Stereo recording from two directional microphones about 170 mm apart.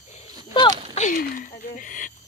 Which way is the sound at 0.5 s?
25° left (ahead or behind).